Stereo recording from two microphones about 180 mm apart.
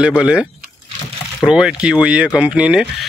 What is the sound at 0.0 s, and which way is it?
Speech, 5° right (ahead or behind).